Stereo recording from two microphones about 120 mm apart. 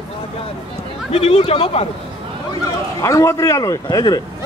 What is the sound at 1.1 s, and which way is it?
Speech, 60° left (ahead or behind).